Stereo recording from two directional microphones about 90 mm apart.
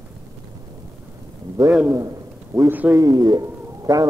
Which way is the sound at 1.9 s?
40° right (ahead or behind).